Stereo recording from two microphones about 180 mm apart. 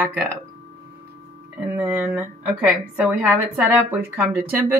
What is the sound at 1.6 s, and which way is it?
A woman's voice, 10° right (ahead or behind).